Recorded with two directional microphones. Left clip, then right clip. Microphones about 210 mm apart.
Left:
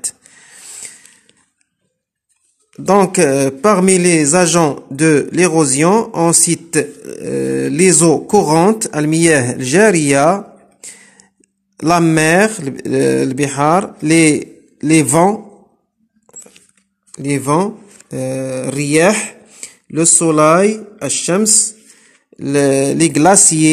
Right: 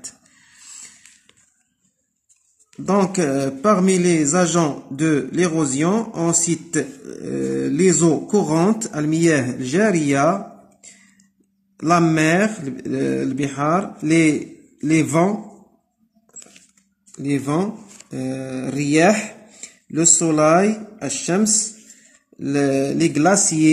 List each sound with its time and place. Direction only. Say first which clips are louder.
2.8 s a man's voice: left 8 dB; 45° left (ahead or behind)
17.1 s a man's voice: left 7 dB; 50° left (ahead or behind)